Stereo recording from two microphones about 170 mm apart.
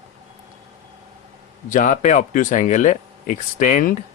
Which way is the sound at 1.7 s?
50° left (ahead or behind).